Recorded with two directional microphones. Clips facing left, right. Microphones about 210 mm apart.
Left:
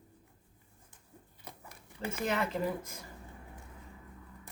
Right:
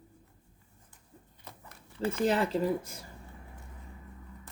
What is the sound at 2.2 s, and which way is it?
Speech, 30° right (ahead or behind).